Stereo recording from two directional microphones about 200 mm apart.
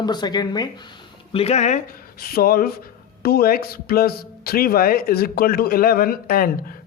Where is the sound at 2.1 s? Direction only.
50° left (ahead or behind).